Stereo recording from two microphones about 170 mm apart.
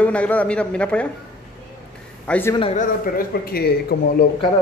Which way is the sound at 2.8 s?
60° left (ahead or behind).